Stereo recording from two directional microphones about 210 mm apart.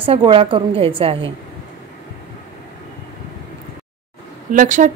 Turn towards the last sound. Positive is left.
turn(degrees=-40)  # may be behind; listen again after turning